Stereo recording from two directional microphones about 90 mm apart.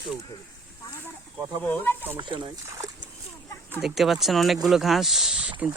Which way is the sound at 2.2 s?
65° right (ahead or behind).